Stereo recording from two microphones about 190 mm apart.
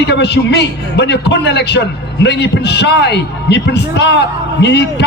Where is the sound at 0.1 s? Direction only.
60° left (ahead or behind).